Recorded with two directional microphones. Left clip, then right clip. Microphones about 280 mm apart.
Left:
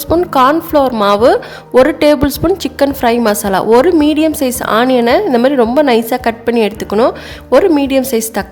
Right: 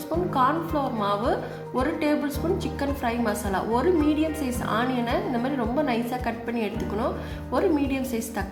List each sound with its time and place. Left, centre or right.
0.1 s a woman's voice: left